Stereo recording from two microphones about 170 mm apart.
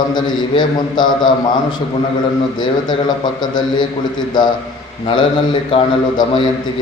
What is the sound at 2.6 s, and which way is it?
A man's voice, 25° left (ahead or behind).